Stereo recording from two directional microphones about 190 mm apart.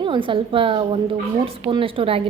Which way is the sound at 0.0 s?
25° right (ahead or behind).